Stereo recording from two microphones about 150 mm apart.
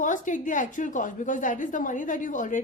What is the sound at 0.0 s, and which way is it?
A woman's voice, 60° left (ahead or behind).